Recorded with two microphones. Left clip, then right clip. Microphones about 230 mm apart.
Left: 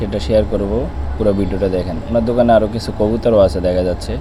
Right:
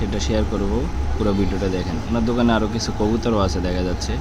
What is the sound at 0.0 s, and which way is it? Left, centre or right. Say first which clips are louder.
Speech: left 8 dB; centre.